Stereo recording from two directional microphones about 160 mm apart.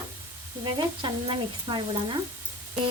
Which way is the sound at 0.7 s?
30° right (ahead or behind).